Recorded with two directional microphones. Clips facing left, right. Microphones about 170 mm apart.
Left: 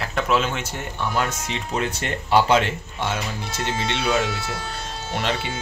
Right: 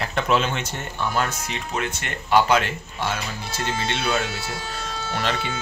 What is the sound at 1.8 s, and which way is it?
Speech, 35° left (ahead or behind).